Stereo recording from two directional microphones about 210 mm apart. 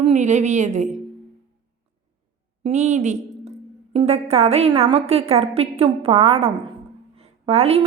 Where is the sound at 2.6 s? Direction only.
35° right (ahead or behind).